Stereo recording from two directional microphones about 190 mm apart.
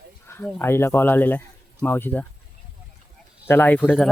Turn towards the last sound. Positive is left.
turn(degrees=10)  # may be behind; listen again after turning